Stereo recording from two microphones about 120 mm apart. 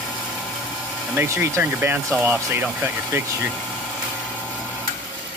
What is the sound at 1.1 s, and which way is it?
Speech, 20° right (ahead or behind).